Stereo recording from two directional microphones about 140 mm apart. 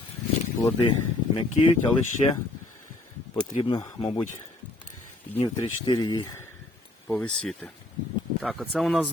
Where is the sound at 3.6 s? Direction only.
35° left (ahead or behind).